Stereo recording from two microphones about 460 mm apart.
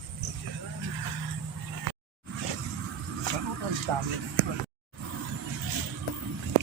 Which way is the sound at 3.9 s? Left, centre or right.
Right.